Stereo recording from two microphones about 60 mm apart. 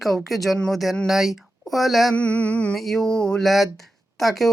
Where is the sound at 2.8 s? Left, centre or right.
Centre.